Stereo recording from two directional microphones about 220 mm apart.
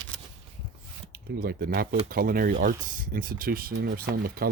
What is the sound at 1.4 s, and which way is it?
Speech, 45° right (ahead or behind).